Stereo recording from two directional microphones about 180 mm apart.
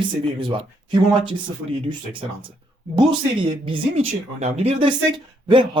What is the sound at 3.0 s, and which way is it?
Speech, 30° right (ahead or behind).